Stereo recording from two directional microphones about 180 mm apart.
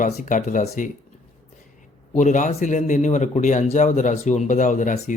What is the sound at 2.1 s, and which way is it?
Speech, 45° left (ahead or behind).